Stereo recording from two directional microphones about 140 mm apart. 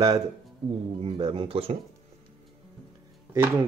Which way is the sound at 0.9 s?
40° right (ahead or behind).